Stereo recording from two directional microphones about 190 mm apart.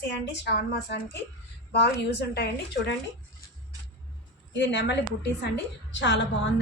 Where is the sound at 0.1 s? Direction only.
65° left (ahead or behind).